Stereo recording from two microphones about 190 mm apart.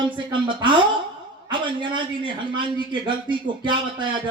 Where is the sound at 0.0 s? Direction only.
25° right (ahead or behind).